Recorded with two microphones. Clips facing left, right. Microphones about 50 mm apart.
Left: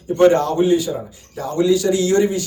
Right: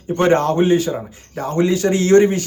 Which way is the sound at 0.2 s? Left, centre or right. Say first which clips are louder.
Left 1 dB; right.